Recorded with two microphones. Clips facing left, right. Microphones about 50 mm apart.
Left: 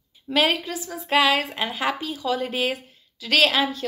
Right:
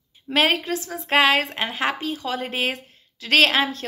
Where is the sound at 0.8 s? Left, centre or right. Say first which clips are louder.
Even; right.